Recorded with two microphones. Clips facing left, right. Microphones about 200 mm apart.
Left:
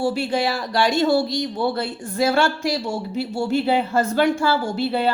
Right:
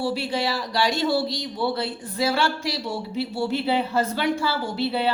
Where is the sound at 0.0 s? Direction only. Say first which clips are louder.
Left 4 dB; 50° left (ahead or behind).